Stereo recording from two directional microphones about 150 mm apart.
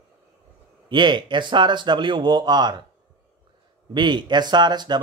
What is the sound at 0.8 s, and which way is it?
Speech, 30° right (ahead or behind).